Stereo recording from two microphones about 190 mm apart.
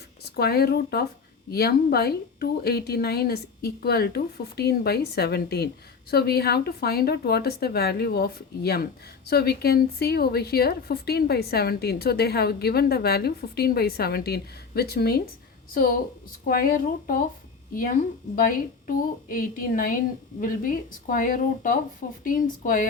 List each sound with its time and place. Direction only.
0.3 s a woman's voice: 55° left (ahead or behind)
18.3 s a woman's voice: 45° left (ahead or behind)